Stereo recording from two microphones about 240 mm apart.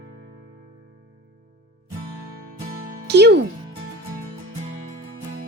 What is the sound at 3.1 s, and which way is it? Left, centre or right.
Speech, right.